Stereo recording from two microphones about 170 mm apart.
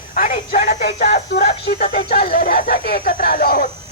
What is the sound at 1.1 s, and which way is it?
Speech, 70° left (ahead or behind).